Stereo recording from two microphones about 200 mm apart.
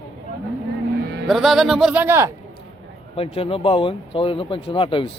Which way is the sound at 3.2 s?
30° left (ahead or behind).